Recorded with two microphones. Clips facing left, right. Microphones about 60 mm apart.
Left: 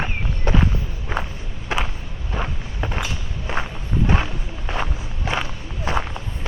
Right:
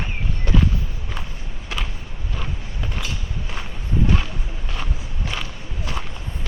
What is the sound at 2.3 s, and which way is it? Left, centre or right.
Vehicle, left.